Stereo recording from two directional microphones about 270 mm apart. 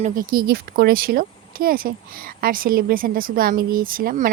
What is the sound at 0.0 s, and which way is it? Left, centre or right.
A woman's voice, right.